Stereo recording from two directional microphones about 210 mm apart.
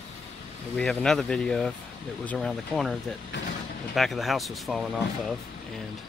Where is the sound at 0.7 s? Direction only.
5° left (ahead or behind).